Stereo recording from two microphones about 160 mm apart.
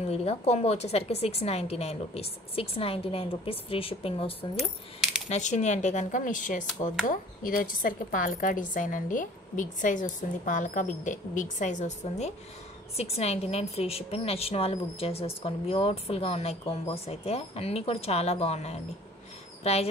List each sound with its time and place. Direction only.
0.1 s a woman's voice: 40° left (ahead or behind)
5.3 s a woman's voice: 45° left (ahead or behind)